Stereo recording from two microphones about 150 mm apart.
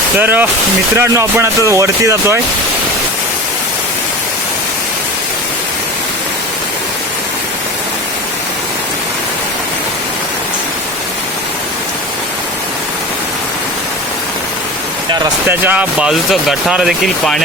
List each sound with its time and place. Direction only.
0.2 s speech: 15° right (ahead or behind)
15.4 s speech: 10° right (ahead or behind)